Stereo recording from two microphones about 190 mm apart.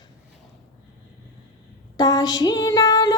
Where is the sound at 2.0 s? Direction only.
20° left (ahead or behind).